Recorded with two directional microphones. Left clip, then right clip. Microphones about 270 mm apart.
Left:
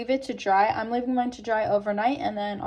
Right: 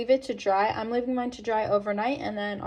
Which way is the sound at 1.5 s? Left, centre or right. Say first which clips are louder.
Even; left.